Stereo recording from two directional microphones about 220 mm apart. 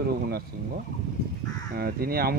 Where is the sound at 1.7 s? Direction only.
45° right (ahead or behind).